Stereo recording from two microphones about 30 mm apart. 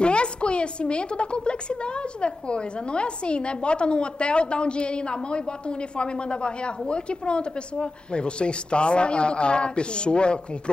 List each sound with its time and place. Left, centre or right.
0.0 s a woman's voice: left